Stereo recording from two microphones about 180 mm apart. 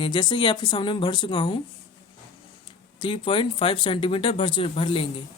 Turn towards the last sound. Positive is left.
turn(degrees=30)  # may be behind; listen again after turning